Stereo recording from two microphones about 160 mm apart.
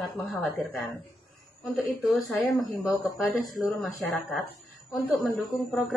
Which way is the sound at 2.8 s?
20° left (ahead or behind).